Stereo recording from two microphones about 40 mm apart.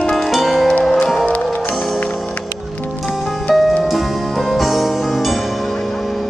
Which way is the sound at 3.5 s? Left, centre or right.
Centre.